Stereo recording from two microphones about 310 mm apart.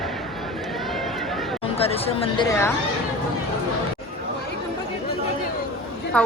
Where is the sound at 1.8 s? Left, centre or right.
Centre.